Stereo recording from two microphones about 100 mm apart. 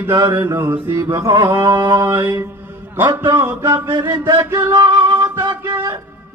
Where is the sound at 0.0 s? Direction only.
30° right (ahead or behind).